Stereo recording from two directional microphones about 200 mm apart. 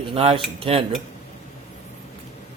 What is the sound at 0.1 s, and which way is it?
Speech, 25° right (ahead or behind).